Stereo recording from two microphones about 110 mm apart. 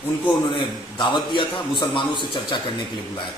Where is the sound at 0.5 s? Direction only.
45° left (ahead or behind).